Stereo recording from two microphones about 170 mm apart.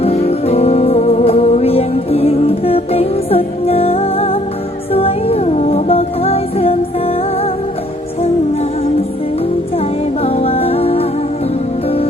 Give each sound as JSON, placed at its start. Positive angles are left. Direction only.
{"t": 0.0, "sound": "music", "side_deg": 35}
{"t": 10.2, "sound": "music", "side_deg": 35}